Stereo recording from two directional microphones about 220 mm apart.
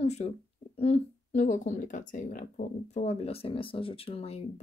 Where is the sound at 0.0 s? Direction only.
30° left (ahead or behind).